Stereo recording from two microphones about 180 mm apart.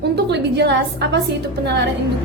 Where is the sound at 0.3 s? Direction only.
70° right (ahead or behind).